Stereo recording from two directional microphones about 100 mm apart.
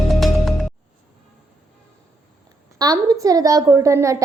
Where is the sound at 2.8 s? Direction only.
40° right (ahead or behind).